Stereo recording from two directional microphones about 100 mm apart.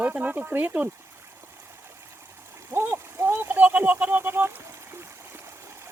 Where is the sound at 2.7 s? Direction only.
25° right (ahead or behind).